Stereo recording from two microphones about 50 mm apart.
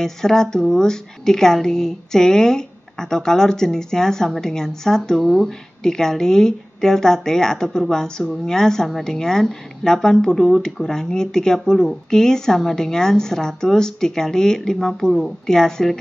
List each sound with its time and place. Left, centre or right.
0.0 s a woman's voice: centre
5.2 s speech: centre
5.8 s a woman's voice: centre